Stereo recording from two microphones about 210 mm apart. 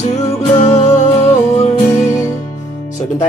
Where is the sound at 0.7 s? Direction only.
30° left (ahead or behind).